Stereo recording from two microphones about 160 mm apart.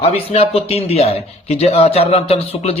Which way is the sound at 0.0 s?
40° left (ahead or behind).